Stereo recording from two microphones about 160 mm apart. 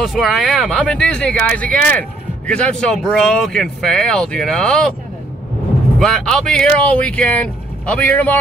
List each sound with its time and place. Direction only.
0.0 s speech: centre (ahead or behind)
5.9 s speech: centre (ahead or behind)